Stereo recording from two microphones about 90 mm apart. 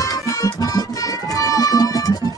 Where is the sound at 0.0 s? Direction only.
40° left (ahead or behind).